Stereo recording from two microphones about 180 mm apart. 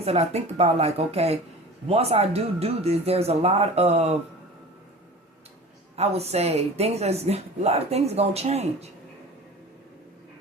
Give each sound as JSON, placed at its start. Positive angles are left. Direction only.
{"t": 0.0, "sound": "speech", "side_deg": -35}
{"t": 6.0, "sound": "speech", "side_deg": -35}